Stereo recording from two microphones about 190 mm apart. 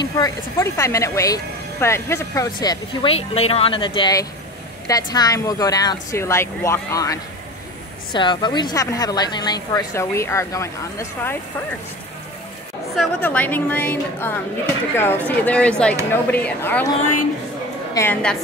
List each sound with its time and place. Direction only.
0.0 s a woman's voice: 20° left (ahead or behind)
13.2 s a woman's voice: 10° left (ahead or behind)
17.9 s a woman's voice: 10° left (ahead or behind)